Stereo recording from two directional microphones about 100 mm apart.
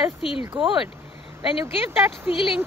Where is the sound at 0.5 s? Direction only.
60° right (ahead or behind).